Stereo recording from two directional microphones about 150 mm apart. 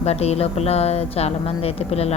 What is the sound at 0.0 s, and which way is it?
A woman's voice, 45° left (ahead or behind).